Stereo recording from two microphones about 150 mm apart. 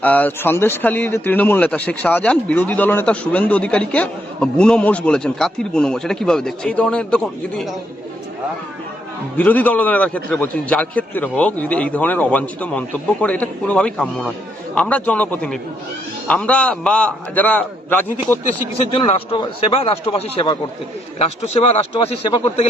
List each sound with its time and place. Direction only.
0.0 s a man's voice: 10° left (ahead or behind)
9.4 s a man's voice: 10° left (ahead or behind)
18.9 s a man's voice: 40° left (ahead or behind)